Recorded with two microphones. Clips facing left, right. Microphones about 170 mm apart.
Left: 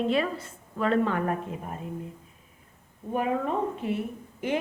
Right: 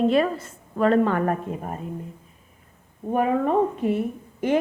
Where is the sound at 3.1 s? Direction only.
50° right (ahead or behind).